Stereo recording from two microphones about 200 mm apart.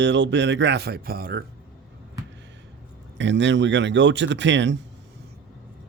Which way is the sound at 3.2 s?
65° right (ahead or behind).